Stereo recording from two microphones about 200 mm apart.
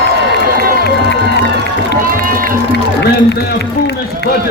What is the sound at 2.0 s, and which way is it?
Run, 45° right (ahead or behind).